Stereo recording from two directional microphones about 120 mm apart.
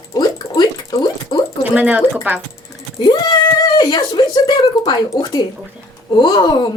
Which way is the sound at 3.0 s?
40° left (ahead or behind).